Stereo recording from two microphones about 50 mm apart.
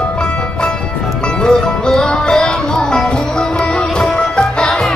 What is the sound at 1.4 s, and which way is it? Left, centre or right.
Music, centre.